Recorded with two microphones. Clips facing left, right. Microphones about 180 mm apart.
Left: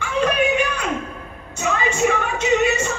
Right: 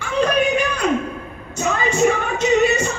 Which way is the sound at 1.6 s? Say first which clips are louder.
Right 2 dB; 40° right (ahead or behind).